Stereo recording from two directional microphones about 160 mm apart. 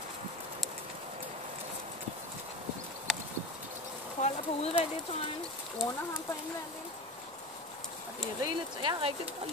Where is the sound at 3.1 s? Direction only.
5° right (ahead or behind).